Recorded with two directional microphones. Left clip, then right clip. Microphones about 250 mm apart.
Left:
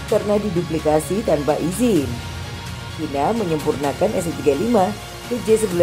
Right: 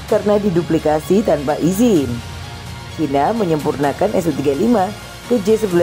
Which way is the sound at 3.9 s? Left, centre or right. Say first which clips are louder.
Right 5 dB; right.